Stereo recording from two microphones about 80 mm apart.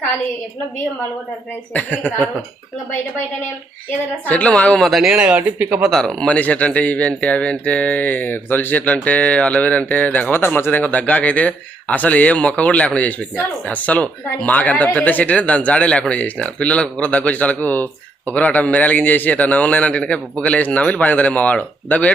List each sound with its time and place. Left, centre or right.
1.7 s a woman's voice: centre
4.3 s speech: centre
4.9 s speech: centre
5.8 s speech: centre